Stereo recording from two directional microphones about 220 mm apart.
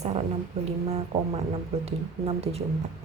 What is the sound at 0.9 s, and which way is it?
Speech, 30° right (ahead or behind).